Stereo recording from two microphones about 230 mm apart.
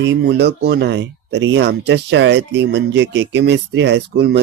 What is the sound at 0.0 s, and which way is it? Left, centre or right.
Speech, right.